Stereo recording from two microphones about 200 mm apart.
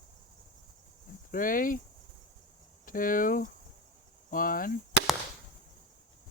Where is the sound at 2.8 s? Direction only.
45° left (ahead or behind).